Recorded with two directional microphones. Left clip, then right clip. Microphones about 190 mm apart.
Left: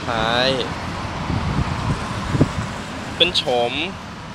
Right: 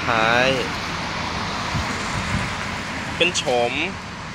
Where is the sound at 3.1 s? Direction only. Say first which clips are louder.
Left 2 dB; 10° left (ahead or behind).